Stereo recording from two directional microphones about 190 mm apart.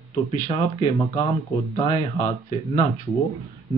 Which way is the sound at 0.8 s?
30° left (ahead or behind).